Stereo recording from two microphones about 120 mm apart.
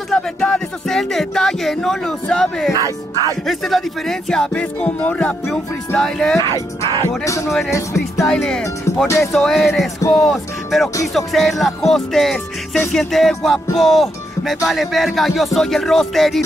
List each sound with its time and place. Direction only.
0.1 s speech: 5° left (ahead or behind)
2.7 s speech: 30° right (ahead or behind)
3.4 s speech: centre (ahead or behind)
6.3 s speech: 25° left (ahead or behind)
7.4 s speech: centre (ahead or behind)
9.0 s speech: 25° left (ahead or behind)
9.3 s speech: 5° left (ahead or behind)